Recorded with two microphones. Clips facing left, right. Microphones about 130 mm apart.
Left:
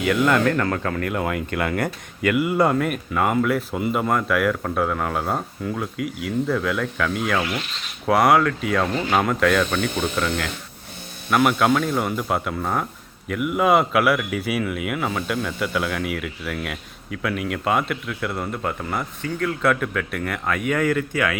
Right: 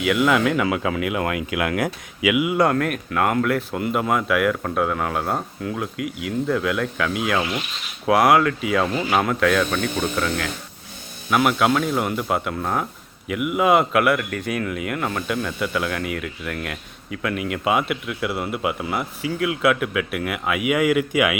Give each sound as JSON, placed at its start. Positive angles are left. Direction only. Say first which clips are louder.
{"t": 0.0, "sound": "a man's voice", "louder": "even", "side_deg": -5}